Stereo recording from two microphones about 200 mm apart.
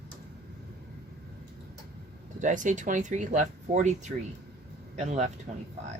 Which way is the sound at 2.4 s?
40° right (ahead or behind).